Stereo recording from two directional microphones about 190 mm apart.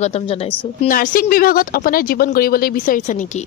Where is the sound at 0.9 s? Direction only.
50° left (ahead or behind).